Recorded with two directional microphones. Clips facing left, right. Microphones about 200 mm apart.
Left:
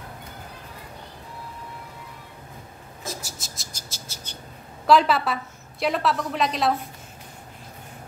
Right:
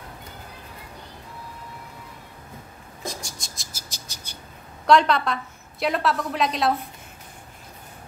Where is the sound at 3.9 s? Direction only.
15° right (ahead or behind).